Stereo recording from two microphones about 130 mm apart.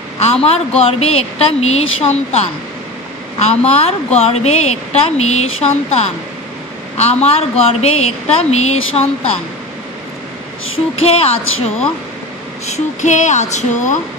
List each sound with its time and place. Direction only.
0.2 s a woman's voice: 50° left (ahead or behind)
3.4 s a woman's voice: 50° left (ahead or behind)
11.0 s a woman's voice: 50° left (ahead or behind)
12.6 s speech: 60° left (ahead or behind)